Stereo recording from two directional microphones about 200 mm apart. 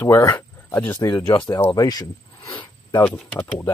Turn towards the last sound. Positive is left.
turn(degrees=10)  # may be behind; listen again after turning